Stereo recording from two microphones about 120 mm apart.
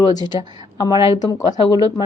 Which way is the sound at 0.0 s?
35° left (ahead or behind).